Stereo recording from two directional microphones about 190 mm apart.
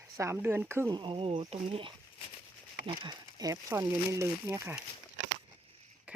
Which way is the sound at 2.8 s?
20° right (ahead or behind).